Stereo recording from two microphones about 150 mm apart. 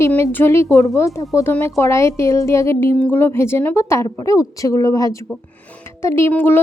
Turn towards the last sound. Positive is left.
turn(degrees=15)  # may be behind; listen again after turning